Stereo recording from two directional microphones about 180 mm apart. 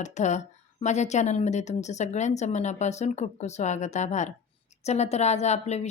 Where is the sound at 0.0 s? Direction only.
40° left (ahead or behind).